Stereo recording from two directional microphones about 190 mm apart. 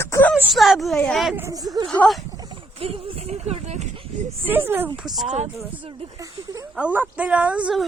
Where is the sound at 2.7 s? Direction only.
30° right (ahead or behind).